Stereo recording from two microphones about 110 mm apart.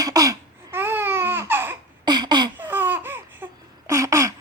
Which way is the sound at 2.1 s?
40° right (ahead or behind).